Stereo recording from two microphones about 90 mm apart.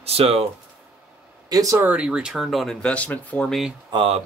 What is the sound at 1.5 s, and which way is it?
Speech, 35° right (ahead or behind).